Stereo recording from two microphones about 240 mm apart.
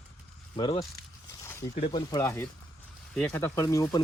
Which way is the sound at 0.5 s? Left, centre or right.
Centre.